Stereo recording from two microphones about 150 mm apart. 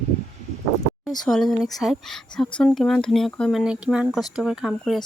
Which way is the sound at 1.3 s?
Centre (ahead or behind).